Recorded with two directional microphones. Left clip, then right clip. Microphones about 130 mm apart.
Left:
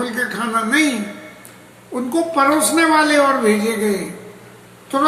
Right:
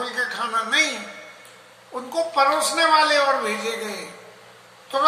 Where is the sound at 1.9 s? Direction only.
20° left (ahead or behind).